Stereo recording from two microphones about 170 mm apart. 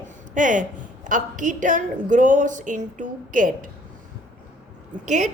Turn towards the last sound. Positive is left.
turn(degrees=-45)  # may be behind; listen again after turning